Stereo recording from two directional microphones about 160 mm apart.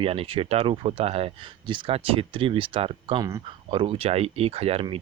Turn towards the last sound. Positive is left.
turn(degrees=-40)  # may be behind; listen again after turning